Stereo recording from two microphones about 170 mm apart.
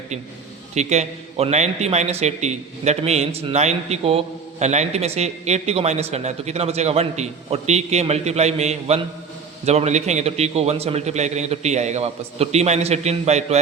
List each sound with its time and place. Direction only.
0.7 s a man's voice: 40° right (ahead or behind)